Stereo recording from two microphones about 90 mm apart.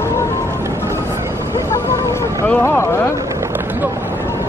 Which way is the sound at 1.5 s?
30° left (ahead or behind).